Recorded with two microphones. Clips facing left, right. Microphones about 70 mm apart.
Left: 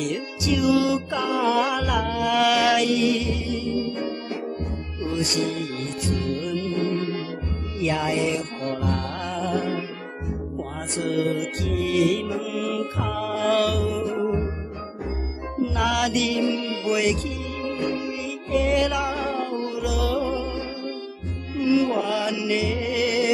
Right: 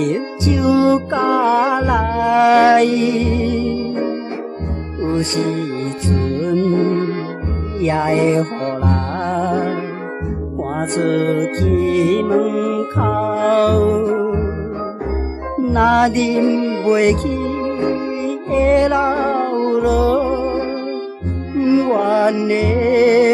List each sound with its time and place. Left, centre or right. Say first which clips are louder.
0.0 s music: right 9 dB; right
5.0 s music: right 7 dB; right
10.8 s music: right 8 dB; right
15.5 s music: right 10 dB; right